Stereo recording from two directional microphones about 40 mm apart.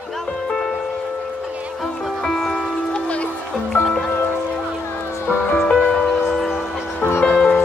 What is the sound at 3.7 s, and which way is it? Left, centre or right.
Music, left.